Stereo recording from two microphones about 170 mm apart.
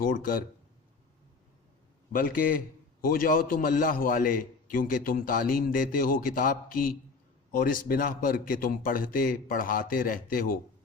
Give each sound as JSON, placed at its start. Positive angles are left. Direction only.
{"t": 0.0, "sound": "a man's voice", "side_deg": 55}
{"t": 2.1, "sound": "a man's voice", "side_deg": 55}